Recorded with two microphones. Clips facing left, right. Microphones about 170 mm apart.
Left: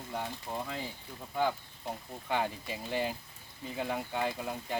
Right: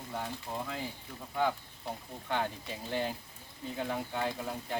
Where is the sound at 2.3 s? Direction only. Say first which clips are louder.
Left 1 dB; 5° left (ahead or behind).